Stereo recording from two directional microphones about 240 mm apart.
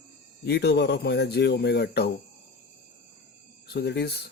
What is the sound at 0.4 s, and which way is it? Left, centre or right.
Speech, left.